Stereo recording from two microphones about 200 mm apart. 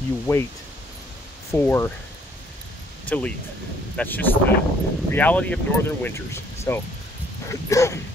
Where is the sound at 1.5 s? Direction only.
10° left (ahead or behind).